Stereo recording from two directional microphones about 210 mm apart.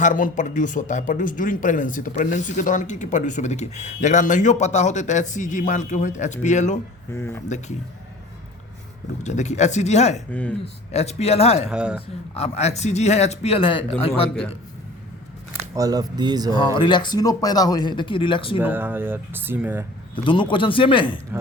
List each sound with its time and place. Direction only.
0.0 s speech: 40° left (ahead or behind)
7.1 s speech: 10° left (ahead or behind)
7.4 s speech: 35° left (ahead or behind)
9.2 s speech: 35° left (ahead or behind)
11.7 s a man's voice: 5° right (ahead or behind)
12.3 s speech: 30° left (ahead or behind)
14.3 s a man's voice: 5° left (ahead or behind)
15.7 s speech: 15° right (ahead or behind)
16.6 s speech: 20° left (ahead or behind)
18.6 s speech: 10° right (ahead or behind)
20.2 s speech: 25° left (ahead or behind)